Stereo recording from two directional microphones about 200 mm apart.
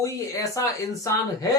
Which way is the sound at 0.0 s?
15° left (ahead or behind).